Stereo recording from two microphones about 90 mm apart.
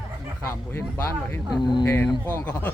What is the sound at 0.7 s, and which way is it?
Speech, 25° left (ahead or behind).